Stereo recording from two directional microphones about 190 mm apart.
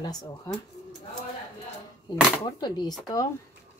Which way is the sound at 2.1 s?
20° left (ahead or behind).